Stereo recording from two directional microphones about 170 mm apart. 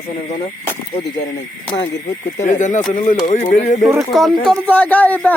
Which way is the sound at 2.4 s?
45° left (ahead or behind).